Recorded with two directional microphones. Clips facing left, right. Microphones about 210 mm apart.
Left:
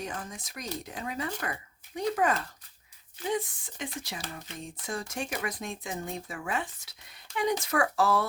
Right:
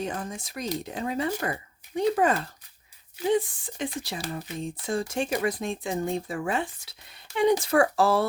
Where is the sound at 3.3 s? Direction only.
30° right (ahead or behind).